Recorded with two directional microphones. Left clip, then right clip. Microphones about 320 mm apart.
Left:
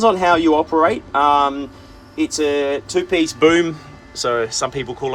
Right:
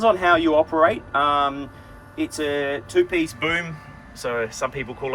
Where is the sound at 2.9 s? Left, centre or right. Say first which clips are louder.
Left 3 dB; centre.